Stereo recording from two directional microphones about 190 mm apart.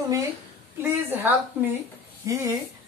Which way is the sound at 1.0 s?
10° right (ahead or behind).